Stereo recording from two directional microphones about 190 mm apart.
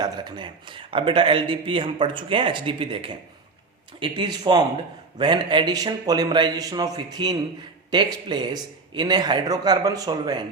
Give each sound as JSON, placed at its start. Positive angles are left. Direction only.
{"t": 0.0, "sound": "speech", "side_deg": -25}